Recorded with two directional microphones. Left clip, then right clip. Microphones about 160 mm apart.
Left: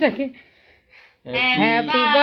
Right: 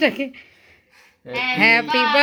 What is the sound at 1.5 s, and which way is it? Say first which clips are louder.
Speech: right 7 dB; 15° right (ahead or behind).